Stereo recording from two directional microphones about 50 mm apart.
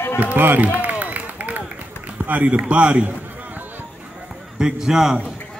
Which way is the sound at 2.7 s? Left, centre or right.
Right.